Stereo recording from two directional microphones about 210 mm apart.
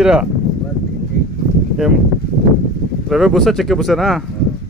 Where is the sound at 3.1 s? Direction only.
Centre (ahead or behind).